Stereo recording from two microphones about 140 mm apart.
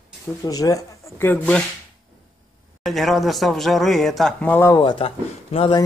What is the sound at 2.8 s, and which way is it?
A man's voice, centre (ahead or behind).